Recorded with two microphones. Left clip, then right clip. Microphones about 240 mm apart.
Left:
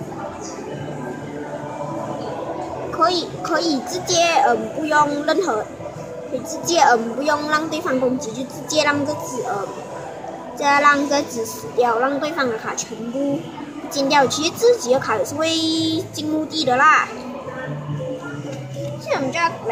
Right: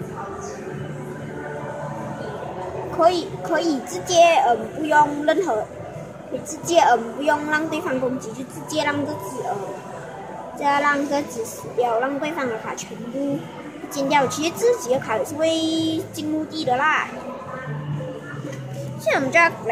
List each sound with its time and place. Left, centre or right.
3.0 s a woman's voice: centre
6.6 s a woman's voice: centre
10.6 s a woman's voice: centre
13.9 s a woman's voice: centre
19.0 s speech: centre